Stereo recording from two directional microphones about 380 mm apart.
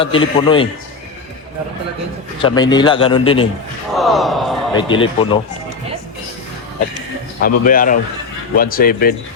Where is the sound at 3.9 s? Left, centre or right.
Centre.